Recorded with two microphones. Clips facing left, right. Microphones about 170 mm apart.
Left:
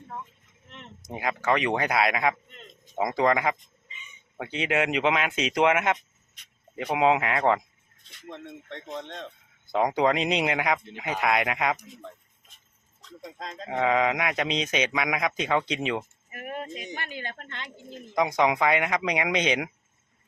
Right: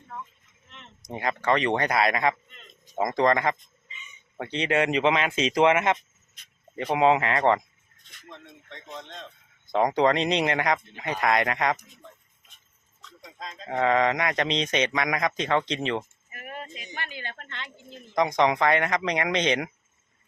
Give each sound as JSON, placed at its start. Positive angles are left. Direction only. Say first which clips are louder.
{"t": 0.9, "sound": "speech", "louder": "right 1 dB", "side_deg": 5}
{"t": 9.6, "sound": "speech", "louder": "right 1 dB", "side_deg": 5}
{"t": 13.0, "sound": "a sound", "louder": "left 6 dB", "side_deg": 40}
{"t": 13.7, "sound": "speech", "louder": "right 1 dB", "side_deg": 5}
{"t": 16.7, "sound": "speech", "louder": "left 2 dB", "side_deg": 45}
{"t": 18.1, "sound": "speech", "louder": "right 1 dB", "side_deg": 5}